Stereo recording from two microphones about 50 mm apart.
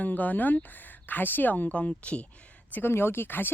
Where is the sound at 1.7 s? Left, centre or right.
Left.